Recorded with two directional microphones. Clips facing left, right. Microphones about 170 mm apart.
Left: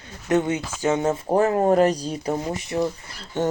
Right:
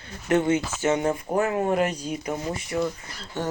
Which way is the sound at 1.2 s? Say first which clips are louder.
Left 5 dB; 35° left (ahead or behind).